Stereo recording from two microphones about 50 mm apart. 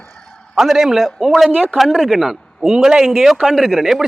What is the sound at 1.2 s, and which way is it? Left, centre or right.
Speech, centre.